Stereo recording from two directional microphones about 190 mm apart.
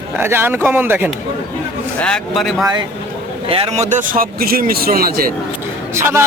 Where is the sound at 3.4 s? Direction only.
30° right (ahead or behind); by 5.3 s 50° right (ahead or behind).